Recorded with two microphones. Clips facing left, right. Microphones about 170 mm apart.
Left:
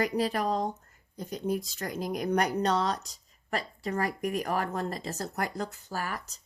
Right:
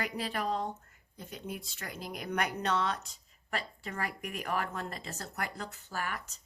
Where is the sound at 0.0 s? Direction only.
40° left (ahead or behind).